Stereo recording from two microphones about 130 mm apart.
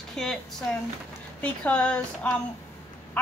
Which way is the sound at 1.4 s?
10° left (ahead or behind).